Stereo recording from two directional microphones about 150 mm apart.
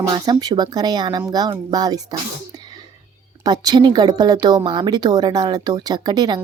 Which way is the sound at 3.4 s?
25° right (ahead or behind).